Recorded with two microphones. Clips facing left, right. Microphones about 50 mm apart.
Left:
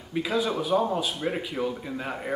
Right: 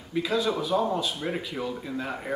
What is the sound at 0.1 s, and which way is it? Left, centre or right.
Speech, centre.